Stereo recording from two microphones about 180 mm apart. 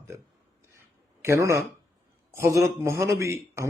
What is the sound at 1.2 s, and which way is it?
A man's voice, 15° right (ahead or behind).